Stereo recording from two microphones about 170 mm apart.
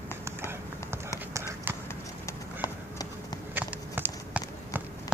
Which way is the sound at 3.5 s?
10° right (ahead or behind).